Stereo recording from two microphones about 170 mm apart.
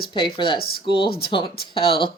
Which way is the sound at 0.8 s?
30° left (ahead or behind).